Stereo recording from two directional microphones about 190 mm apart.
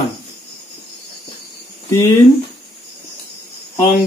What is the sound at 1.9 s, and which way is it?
Speech, 15° left (ahead or behind).